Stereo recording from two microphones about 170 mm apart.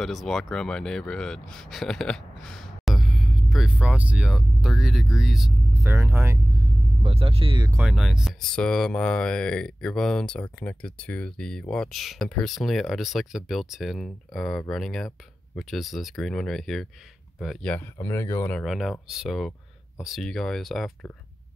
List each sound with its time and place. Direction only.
0.0 s speech: centre (ahead or behind)
5.8 s speech: 15° right (ahead or behind)
7.0 s speech: 35° right (ahead or behind)
7.7 s speech: 5° right (ahead or behind)
18.0 s speech: 15° left (ahead or behind)